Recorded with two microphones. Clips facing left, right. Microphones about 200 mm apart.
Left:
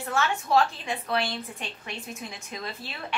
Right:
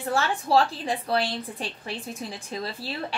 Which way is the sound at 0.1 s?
35° right (ahead or behind).